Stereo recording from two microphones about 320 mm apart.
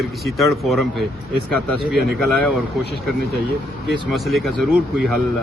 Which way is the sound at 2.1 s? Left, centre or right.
Centre.